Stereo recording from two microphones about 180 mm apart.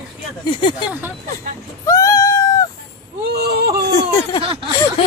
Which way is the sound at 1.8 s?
15° left (ahead or behind).